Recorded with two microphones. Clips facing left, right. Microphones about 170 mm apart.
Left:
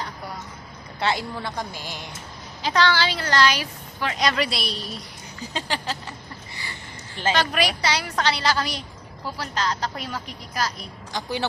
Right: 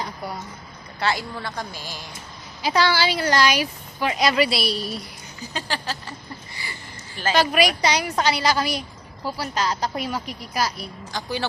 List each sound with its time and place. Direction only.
0.9 s speech: 25° left (ahead or behind)
2.6 s speech: 10° right (ahead or behind)
5.5 s speech: 20° left (ahead or behind)
7.3 s speech: 10° right (ahead or behind)
11.1 s speech: 20° left (ahead or behind)